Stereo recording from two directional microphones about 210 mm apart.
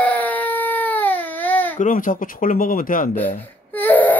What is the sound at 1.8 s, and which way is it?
Speech, 40° left (ahead or behind).